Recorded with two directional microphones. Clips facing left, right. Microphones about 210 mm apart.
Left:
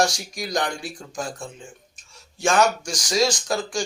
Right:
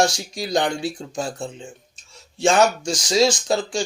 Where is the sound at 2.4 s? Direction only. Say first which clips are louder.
Right 3 dB; 25° right (ahead or behind).